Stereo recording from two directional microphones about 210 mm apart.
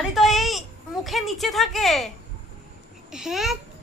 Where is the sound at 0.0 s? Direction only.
Centre (ahead or behind).